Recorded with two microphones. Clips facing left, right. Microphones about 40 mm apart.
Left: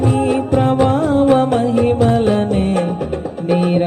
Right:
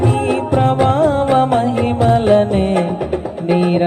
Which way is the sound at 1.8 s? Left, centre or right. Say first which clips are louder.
Even; centre.